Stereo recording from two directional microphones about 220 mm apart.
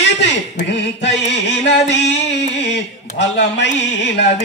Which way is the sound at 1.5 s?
55° left (ahead or behind).